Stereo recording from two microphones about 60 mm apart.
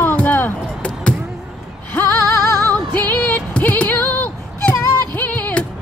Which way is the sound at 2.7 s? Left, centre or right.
Left.